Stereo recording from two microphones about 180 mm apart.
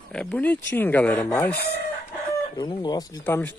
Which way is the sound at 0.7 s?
10° left (ahead or behind).